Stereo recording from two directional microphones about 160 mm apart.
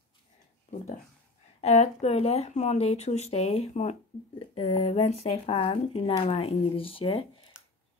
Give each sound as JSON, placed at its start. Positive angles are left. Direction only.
{"t": 1.6, "sound": "speech", "side_deg": 45}